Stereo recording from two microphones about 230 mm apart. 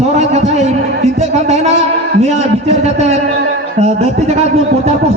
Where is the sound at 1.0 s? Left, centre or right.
Right.